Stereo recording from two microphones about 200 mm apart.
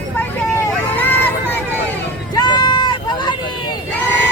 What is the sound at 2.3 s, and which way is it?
Run, 20° left (ahead or behind).